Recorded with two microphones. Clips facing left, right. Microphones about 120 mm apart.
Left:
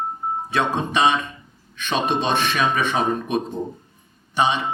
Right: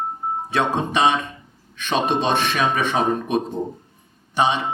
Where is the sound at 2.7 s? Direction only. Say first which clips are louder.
Right 1 dB; 45° right (ahead or behind).